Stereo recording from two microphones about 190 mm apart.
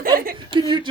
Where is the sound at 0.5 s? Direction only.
25° right (ahead or behind).